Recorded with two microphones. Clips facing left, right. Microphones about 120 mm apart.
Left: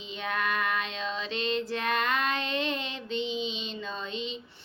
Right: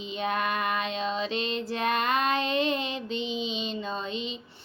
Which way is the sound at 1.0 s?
15° right (ahead or behind).